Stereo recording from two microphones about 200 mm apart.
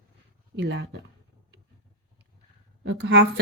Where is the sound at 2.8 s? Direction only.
60° right (ahead or behind).